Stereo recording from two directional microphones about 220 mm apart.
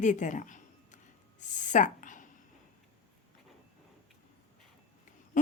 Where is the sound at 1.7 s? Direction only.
35° left (ahead or behind).